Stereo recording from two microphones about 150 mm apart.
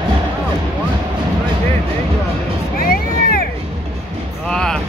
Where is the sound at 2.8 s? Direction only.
75° left (ahead or behind).